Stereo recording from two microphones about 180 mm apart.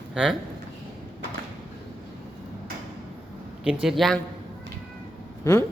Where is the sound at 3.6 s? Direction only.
5° right (ahead or behind).